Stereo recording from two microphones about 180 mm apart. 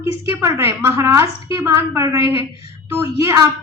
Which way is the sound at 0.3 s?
15° right (ahead or behind).